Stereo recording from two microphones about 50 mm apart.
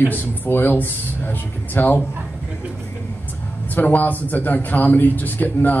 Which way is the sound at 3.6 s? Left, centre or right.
Left.